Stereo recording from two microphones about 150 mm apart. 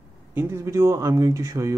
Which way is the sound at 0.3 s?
15° right (ahead or behind).